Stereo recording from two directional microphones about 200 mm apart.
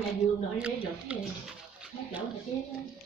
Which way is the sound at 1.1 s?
5° right (ahead or behind).